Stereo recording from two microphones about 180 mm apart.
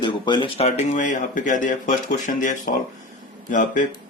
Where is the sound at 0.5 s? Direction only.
35° left (ahead or behind).